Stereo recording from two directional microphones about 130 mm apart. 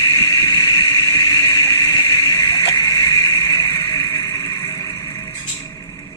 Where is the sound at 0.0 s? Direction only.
25° left (ahead or behind).